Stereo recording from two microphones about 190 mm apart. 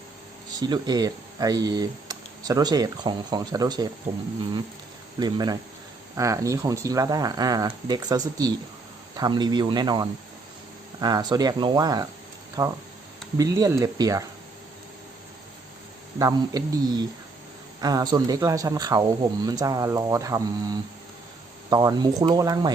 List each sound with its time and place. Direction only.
0.5 s speech: 20° right (ahead or behind)
4.1 s speech: 35° right (ahead or behind)
5.2 s a man's voice: 20° right (ahead or behind)
16.1 s a man's voice: 20° right (ahead or behind)